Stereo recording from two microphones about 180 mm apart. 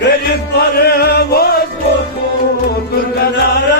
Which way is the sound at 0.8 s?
60° left (ahead or behind).